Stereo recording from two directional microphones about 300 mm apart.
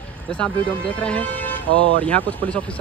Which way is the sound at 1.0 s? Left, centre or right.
Centre.